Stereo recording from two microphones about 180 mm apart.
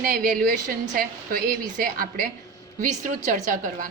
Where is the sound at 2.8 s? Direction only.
45° right (ahead or behind).